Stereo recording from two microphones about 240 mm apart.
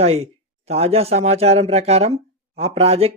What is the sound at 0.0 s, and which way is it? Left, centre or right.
Speech, right.